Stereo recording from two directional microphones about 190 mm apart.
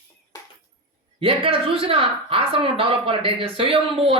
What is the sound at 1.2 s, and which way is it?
Speech, 30° right (ahead or behind).